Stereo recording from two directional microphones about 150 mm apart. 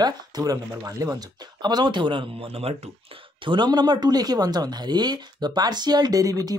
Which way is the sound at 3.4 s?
30° right (ahead or behind).